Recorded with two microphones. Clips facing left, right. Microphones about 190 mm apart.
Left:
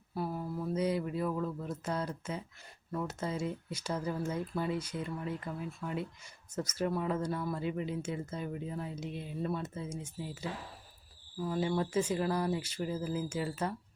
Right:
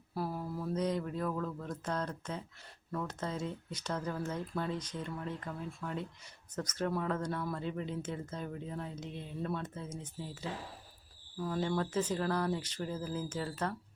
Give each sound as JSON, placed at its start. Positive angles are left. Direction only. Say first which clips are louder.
{"t": 0.1, "sound": "a sound", "louder": "left 1 dB", "side_deg": 0}
{"t": 2.9, "sound": "speech", "louder": "left 2 dB", "side_deg": 10}
{"t": 11.3, "sound": "speech", "louder": "left 2 dB", "side_deg": 10}